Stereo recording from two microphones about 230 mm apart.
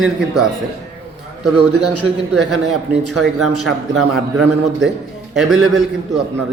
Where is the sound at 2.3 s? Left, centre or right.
Centre.